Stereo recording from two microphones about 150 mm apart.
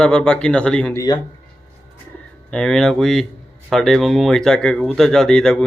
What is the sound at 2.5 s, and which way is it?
Speech, 5° left (ahead or behind).